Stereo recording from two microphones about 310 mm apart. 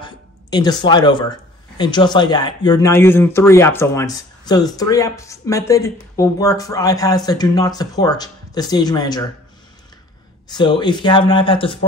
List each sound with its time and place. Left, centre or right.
0.0 s speech: centre
10.5 s speech: centre